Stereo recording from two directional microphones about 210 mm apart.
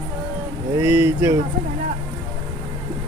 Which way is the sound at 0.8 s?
10° right (ahead or behind).